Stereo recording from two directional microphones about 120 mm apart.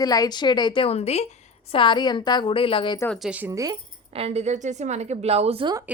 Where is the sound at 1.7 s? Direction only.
40° left (ahead or behind).